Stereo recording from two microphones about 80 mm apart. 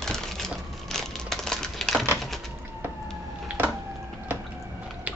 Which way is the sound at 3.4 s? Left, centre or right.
Right.